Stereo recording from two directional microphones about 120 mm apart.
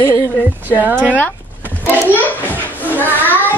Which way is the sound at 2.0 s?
15° right (ahead or behind).